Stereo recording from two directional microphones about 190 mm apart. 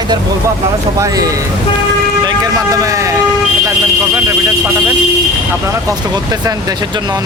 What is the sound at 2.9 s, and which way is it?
Speech, 15° right (ahead or behind).